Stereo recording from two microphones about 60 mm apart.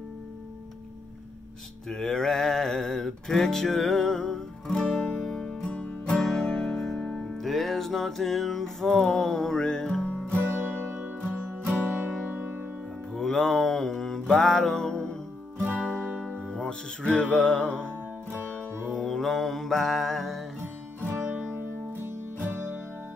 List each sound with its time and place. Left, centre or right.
1.9 s music: centre
10.0 s music: left
10.4 s music: right
13.1 s mantra: centre
16.0 s music: right
16.4 s music: centre
17.7 s music: right
18.9 s music: centre
21.0 s music: right